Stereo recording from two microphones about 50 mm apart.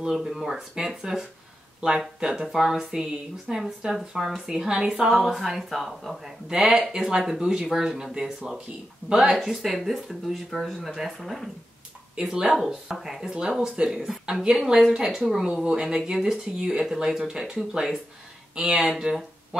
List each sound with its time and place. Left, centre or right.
0.1 s a woman's voice: centre
12.2 s a woman's voice: centre
13.3 s a woman's voice: centre
18.5 s speech: centre